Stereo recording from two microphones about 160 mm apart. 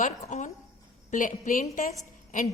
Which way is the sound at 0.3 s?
50° left (ahead or behind).